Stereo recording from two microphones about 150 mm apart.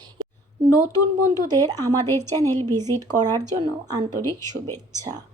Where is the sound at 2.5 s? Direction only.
25° right (ahead or behind).